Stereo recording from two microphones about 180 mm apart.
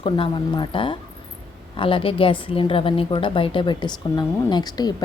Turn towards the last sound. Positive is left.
turn(degrees=20)  # may be behind; listen again after turning